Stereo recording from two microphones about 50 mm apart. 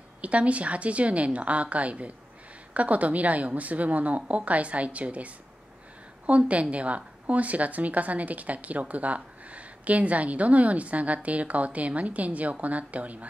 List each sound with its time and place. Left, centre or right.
0.2 s a woman's voice: right